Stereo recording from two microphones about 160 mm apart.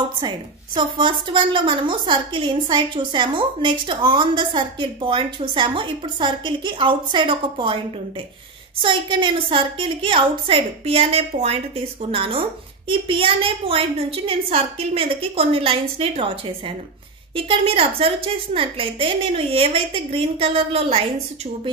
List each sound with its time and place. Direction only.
0.7 s a woman's voice: 30° right (ahead or behind)
8.8 s a woman's voice: 30° right (ahead or behind)